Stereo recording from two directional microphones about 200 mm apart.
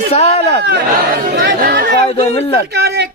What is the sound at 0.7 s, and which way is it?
Speech, 45° right (ahead or behind).